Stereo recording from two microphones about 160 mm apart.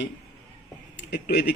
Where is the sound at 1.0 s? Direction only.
90° left.